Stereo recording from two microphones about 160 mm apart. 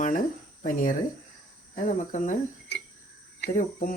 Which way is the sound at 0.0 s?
55° left (ahead or behind).